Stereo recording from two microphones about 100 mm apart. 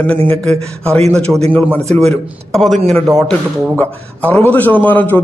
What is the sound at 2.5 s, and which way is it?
Speech, centre (ahead or behind).